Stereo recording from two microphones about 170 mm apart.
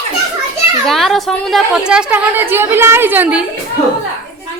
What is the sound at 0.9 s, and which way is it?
A woman's voice, centre (ahead or behind).